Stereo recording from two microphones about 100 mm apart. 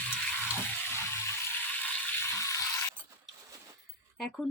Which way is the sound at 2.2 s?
30° left (ahead or behind).